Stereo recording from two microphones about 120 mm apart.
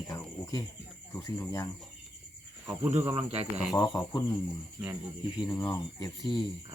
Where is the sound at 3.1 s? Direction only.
60° right (ahead or behind).